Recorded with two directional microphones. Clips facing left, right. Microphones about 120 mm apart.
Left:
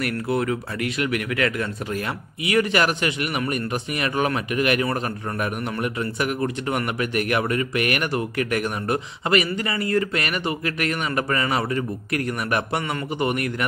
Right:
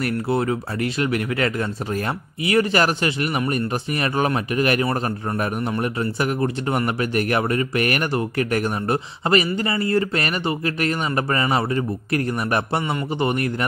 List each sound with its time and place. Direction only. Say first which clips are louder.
0.0 s a man's voice: right 2 dB; 30° right (ahead or behind)